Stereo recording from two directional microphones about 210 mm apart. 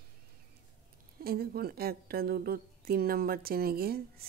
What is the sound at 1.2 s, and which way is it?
A woman's voice, 45° right (ahead or behind).